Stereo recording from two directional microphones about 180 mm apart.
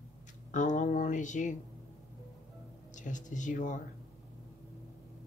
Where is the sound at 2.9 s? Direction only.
45° left (ahead or behind).